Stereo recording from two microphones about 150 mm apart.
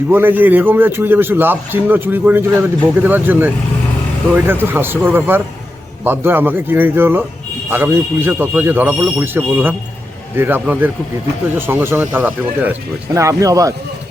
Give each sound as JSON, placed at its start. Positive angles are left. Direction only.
{"t": 0.1, "sound": "a man's voice", "side_deg": -15}